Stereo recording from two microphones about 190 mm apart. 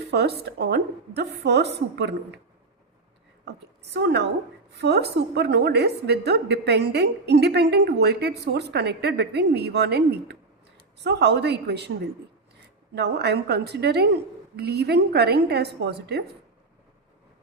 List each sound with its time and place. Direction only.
0.1 s a woman's voice: 60° right (ahead or behind)
3.4 s a woman's voice: 60° right (ahead or behind)
12.9 s a woman's voice: 60° right (ahead or behind)